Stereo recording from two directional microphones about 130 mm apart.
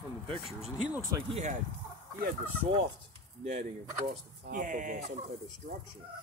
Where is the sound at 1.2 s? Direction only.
55° right (ahead or behind).